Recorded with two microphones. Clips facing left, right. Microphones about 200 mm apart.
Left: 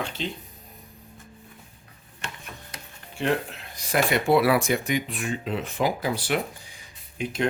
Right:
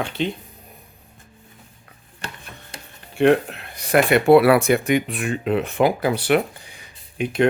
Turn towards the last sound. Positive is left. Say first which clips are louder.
# right 7 dB
turn(degrees=-65)  # may be behind; listen again after turning